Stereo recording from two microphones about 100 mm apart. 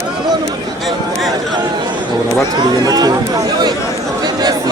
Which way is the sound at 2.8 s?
40° right (ahead or behind).